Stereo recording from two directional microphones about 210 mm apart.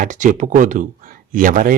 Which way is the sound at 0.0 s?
40° right (ahead or behind).